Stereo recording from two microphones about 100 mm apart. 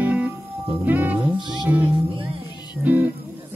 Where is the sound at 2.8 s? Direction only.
15° right (ahead or behind).